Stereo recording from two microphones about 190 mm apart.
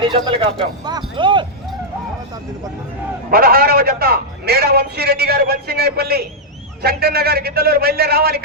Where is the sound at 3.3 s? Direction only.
50° right (ahead or behind).